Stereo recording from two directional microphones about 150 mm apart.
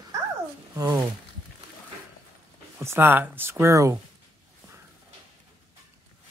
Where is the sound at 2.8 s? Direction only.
15° right (ahead or behind).